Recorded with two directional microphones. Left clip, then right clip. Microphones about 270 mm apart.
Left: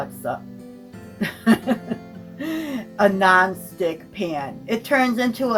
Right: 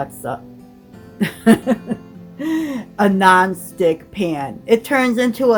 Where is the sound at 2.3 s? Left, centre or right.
Right.